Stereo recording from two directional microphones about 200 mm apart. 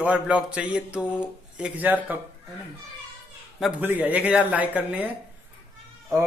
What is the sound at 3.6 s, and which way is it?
Speech, 10° right (ahead or behind).